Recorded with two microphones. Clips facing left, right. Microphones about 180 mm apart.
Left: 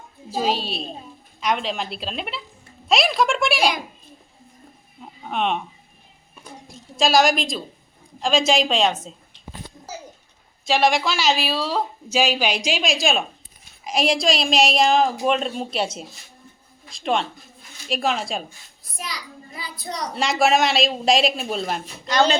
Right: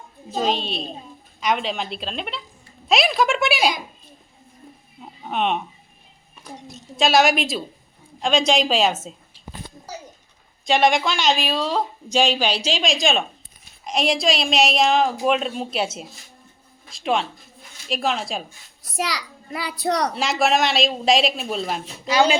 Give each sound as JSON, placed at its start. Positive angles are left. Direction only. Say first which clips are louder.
{"t": 0.3, "sound": "speech", "louder": "even", "side_deg": 5}
{"t": 4.9, "sound": "a sound", "louder": "right 1 dB", "side_deg": 0}
{"t": 6.9, "sound": "speech", "louder": "even", "side_deg": 0}
{"t": 10.7, "sound": "speech", "louder": "right 1 dB", "side_deg": 0}
{"t": 18.8, "sound": "a child's voice", "louder": "right 8 dB", "side_deg": -80}
{"t": 20.1, "sound": "speech", "louder": "left 1 dB", "side_deg": 0}